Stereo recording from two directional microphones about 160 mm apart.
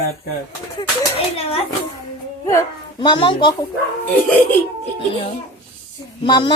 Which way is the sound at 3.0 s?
30° left (ahead or behind).